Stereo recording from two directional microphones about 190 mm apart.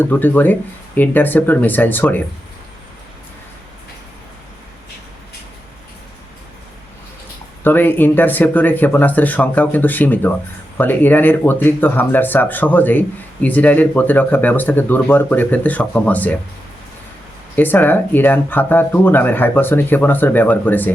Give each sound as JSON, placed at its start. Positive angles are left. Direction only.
{"t": 0.0, "sound": "speech", "side_deg": 10}
{"t": 7.6, "sound": "speech", "side_deg": 10}
{"t": 17.6, "sound": "speech", "side_deg": 10}